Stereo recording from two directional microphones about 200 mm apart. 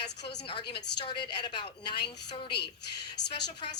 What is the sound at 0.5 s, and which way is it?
A woman's voice, 25° left (ahead or behind).